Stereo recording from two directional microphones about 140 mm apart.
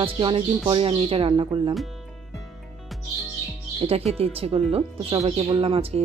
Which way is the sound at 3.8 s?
45° right (ahead or behind).